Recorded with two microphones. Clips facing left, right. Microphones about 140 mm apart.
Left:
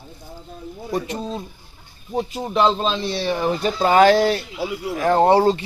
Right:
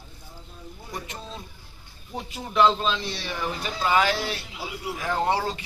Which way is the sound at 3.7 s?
45° left (ahead or behind).